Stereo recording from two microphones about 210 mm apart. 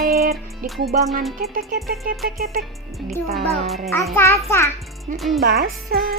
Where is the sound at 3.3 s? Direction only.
Centre (ahead or behind).